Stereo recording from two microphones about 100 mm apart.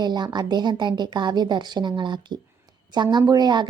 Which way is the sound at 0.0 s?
45° right (ahead or behind).